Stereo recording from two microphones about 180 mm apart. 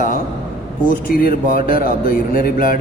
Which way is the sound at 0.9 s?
50° left (ahead or behind).